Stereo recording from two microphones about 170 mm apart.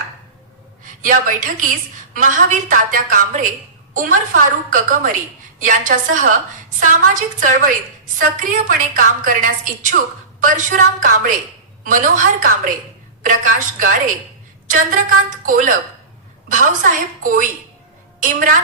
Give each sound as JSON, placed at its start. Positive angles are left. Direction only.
{"t": 1.0, "sound": "a woman's voice", "side_deg": -50}